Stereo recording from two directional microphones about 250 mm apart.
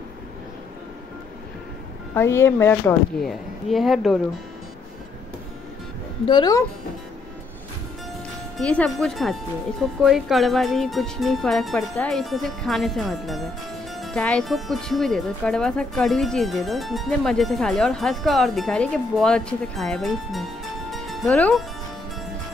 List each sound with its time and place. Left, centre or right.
2.1 s speech: centre
6.2 s speech: centre
8.5 s speech: centre
20.9 s music: centre